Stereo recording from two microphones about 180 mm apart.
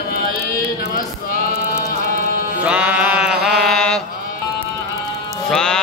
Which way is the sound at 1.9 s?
60° left (ahead or behind).